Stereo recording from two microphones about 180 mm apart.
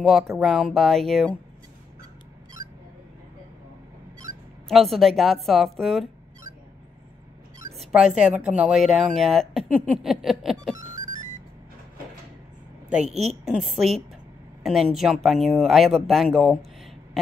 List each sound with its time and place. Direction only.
0.4 s speech: centre (ahead or behind)
4.6 s speech: centre (ahead or behind)
7.7 s a sound: centre (ahead or behind)
8.4 s speech: 5° right (ahead or behind)
11.1 s vehicle: 45° right (ahead or behind)
13.0 s a woman's voice: 35° right (ahead or behind)
13.5 s speech: centre (ahead or behind)